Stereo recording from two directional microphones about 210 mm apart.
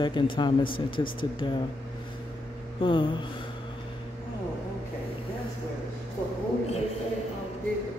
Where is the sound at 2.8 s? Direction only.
25° left (ahead or behind).